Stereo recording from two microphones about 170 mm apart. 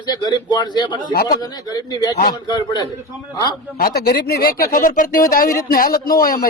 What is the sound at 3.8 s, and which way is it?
A man's voice, 65° left (ahead or behind).